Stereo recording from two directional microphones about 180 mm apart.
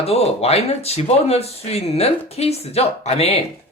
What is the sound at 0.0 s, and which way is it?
Speech, 35° left (ahead or behind).